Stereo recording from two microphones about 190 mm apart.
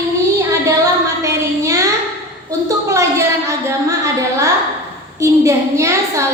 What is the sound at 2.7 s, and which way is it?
A woman's voice, 15° right (ahead or behind).